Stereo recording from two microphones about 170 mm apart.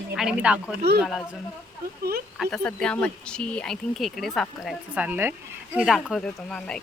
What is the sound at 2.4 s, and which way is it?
Speech, centre (ahead or behind).